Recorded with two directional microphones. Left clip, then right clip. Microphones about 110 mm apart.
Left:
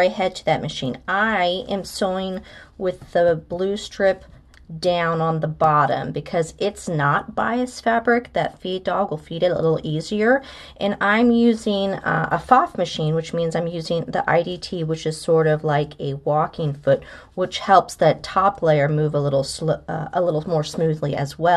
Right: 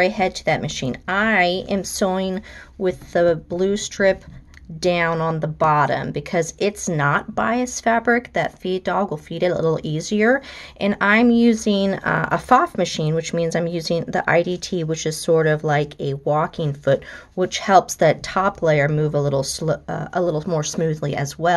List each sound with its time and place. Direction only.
0.0 s a woman's voice: 25° right (ahead or behind)